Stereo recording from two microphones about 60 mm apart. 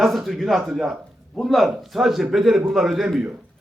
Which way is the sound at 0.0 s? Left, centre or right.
Centre.